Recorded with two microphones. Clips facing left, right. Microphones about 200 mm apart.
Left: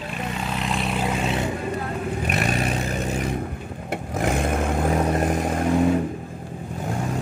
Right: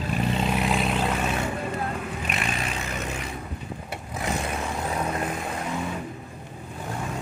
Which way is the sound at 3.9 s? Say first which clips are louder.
Left 7 dB; 50° left (ahead or behind).